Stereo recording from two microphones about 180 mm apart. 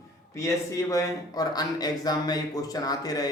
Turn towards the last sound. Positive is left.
turn(degrees=20)  # may be behind; listen again after turning